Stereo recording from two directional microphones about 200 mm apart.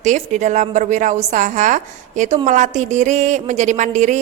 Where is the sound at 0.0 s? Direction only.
35° right (ahead or behind).